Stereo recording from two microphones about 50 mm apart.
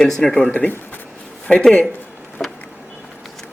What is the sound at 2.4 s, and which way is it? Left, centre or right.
Vehicle, left.